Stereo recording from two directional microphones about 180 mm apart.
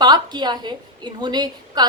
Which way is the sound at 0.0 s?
25° right (ahead or behind).